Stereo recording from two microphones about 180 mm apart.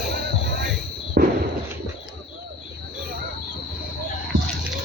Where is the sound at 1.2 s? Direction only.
65° right (ahead or behind).